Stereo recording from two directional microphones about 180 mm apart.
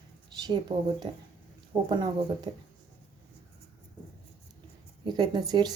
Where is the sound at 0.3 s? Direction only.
25° right (ahead or behind).